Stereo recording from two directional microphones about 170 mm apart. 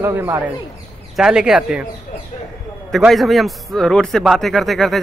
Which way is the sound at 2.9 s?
Centre (ahead or behind).